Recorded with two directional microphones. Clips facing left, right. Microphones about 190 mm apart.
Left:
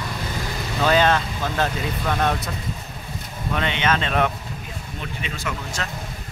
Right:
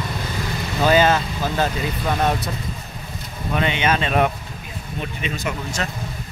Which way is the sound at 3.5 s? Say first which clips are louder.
Right 2 dB; 10° right (ahead or behind).